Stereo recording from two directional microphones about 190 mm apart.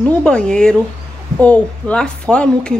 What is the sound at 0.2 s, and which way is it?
A woman's voice, 5° left (ahead or behind).